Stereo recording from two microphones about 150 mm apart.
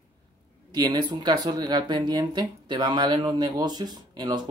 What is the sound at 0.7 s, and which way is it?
Speech, 30° right (ahead or behind).